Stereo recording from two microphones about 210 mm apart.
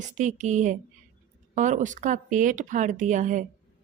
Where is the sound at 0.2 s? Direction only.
35° right (ahead or behind).